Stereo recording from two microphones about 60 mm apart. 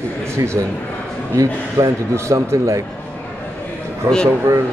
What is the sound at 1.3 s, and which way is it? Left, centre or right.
A man's voice, right.